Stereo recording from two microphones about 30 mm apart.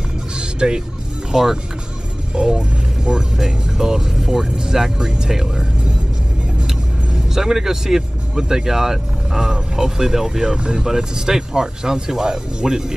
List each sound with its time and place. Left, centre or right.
0.4 s vehicle: right
1.3 s speech: centre
7.3 s speech: centre
8.4 s speech: right
8.6 s speech: centre
10.6 s speech: right